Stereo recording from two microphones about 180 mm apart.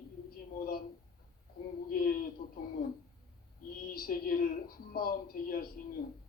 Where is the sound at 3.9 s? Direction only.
55° left (ahead or behind).